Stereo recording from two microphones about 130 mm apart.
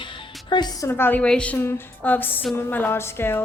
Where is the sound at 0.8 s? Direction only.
15° left (ahead or behind).